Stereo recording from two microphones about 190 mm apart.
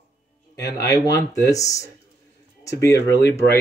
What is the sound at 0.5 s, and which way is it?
Speech, 15° left (ahead or behind).